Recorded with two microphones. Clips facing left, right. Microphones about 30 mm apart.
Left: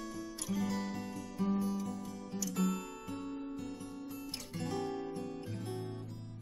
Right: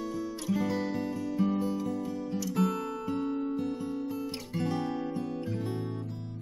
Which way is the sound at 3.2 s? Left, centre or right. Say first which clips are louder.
Right 10 dB; right.